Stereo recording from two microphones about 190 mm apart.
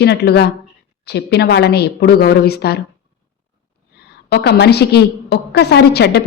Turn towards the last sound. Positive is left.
turn(degrees=60)  # may be behind; listen again after turning